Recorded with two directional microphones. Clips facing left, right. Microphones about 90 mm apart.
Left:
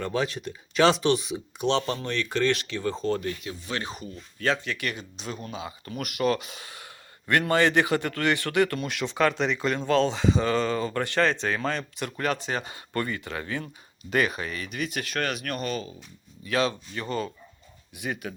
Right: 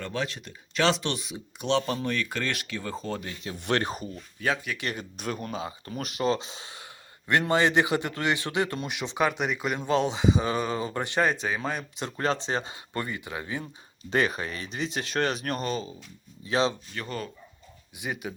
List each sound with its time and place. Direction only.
0.0 s speech: 5° left (ahead or behind); by 3.3 s 15° right (ahead or behind)
3.6 s speech: 60° right (ahead or behind)
4.4 s speech: 10° right (ahead or behind)
4.9 s speech: 50° right (ahead or behind); by 11.9 s 10° right (ahead or behind)
12.1 s speech: 30° right (ahead or behind)
14.1 s speech: 30° right (ahead or behind)
16.9 s speech: centre (ahead or behind)
17.9 s speech: 15° right (ahead or behind)